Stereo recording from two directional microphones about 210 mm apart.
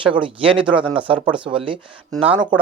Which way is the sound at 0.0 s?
25° right (ahead or behind).